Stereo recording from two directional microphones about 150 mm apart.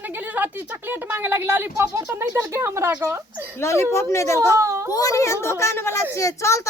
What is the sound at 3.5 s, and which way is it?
A woman's voice, 20° left (ahead or behind).